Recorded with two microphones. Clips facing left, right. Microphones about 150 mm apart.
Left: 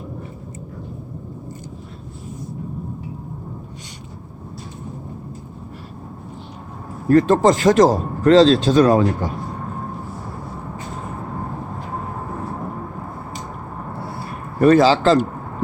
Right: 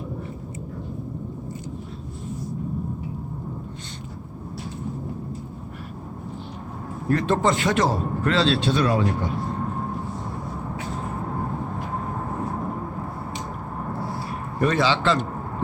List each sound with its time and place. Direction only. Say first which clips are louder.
7.1 s a man's voice: left 8 dB; 40° left (ahead or behind)
14.6 s a man's voice: left 9 dB; 40° left (ahead or behind)